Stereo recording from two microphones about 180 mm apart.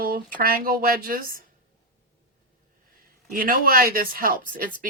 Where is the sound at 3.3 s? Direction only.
55° right (ahead or behind).